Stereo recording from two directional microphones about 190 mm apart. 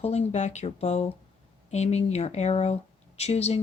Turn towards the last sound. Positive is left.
turn(degrees=35)  # may be behind; listen again after turning